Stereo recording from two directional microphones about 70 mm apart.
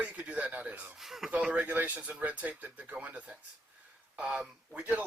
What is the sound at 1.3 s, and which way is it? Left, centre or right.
Speech, centre.